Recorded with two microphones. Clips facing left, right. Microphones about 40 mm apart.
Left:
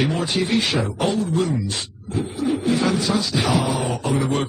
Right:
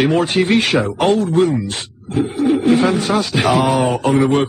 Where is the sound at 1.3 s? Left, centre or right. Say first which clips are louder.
Right 7 dB; right.